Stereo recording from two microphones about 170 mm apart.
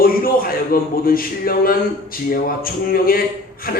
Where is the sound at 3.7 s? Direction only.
60° left (ahead or behind).